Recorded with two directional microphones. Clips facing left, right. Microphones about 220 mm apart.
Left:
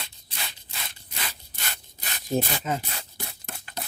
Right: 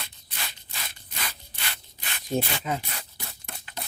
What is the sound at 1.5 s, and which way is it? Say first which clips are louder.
Rub: left 1 dB; 45° left (ahead or behind).